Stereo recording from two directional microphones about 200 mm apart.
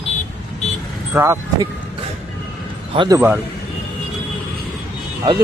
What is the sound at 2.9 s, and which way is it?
Speech, 20° right (ahead or behind).